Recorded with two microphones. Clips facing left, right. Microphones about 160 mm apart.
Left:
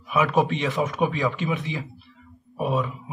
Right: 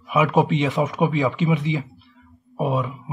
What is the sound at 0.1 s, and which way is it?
A man's voice, 15° right (ahead or behind).